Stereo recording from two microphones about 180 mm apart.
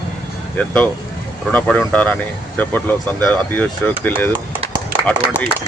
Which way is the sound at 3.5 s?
10° left (ahead or behind).